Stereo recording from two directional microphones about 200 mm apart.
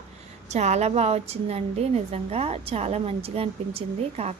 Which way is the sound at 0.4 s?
35° right (ahead or behind).